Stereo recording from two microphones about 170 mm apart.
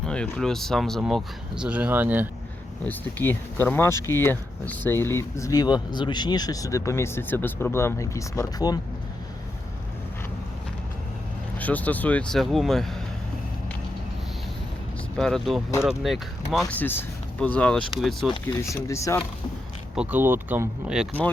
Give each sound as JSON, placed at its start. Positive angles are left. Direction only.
{"t": 0.0, "sound": "speech", "side_deg": 5}
{"t": 2.8, "sound": "speech", "side_deg": 10}
{"t": 11.6, "sound": "speech", "side_deg": 10}
{"t": 15.2, "sound": "speech", "side_deg": 0}
{"t": 18.4, "sound": "speech", "side_deg": 15}
{"t": 20.0, "sound": "speech", "side_deg": -10}